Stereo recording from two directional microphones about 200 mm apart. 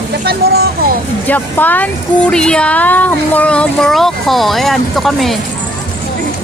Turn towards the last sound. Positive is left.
turn(degrees=0)  # may be behind; listen again after turning